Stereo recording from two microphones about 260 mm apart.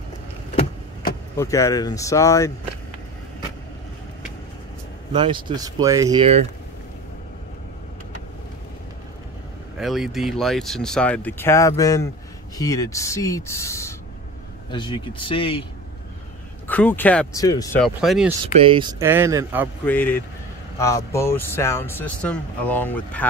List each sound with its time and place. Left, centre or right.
1.4 s speech: centre
5.1 s speech: centre
9.8 s speech: centre
16.6 s speech: centre
17.8 s speech: centre
18.4 s speech: centre
19.8 s speech: centre